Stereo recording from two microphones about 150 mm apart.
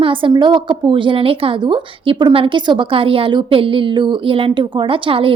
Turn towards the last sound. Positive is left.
turn(degrees=-35)  # may be behind; listen again after turning